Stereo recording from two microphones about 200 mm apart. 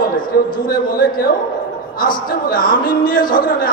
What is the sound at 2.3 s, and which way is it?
A man's voice, 45° left (ahead or behind).